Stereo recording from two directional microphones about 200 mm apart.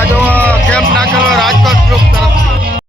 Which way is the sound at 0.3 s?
10° left (ahead or behind).